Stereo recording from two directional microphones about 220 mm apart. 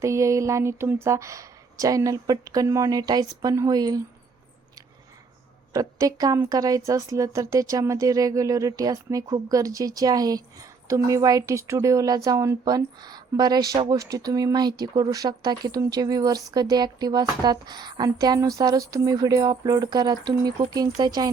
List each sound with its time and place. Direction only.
0.0 s a woman's voice: 15° right (ahead or behind)
5.7 s a woman's voice: 15° right (ahead or behind)